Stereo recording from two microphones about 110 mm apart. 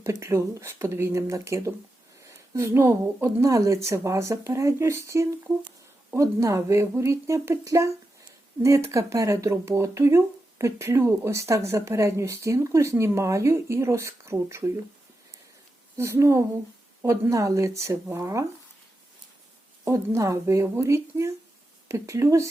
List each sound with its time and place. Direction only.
0.0 s speech: 25° right (ahead or behind)
16.0 s speech: 25° right (ahead or behind)
19.8 s speech: 25° right (ahead or behind)